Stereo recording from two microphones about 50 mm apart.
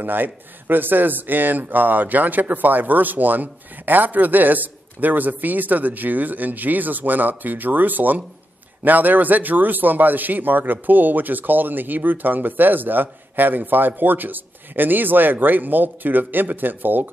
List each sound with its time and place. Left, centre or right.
0.0 s a man's voice: right